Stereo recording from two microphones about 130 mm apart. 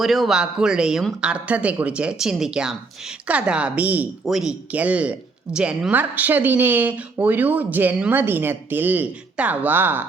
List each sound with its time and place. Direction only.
0.0 s a woman's voice: centre (ahead or behind)